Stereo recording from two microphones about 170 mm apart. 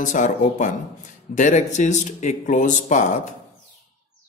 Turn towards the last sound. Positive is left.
turn(degrees=45)  # may be behind; listen again after turning